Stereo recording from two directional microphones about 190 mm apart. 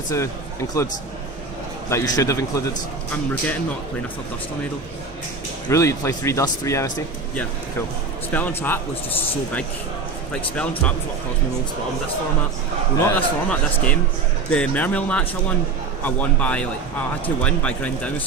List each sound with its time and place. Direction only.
1.9 s speech: 15° left (ahead or behind)
5.6 s speech: 15° left (ahead or behind)
8.3 s speech: 10° left (ahead or behind)
10.5 s speech: 5° left (ahead or behind)
13.0 s speech: 10° left (ahead or behind)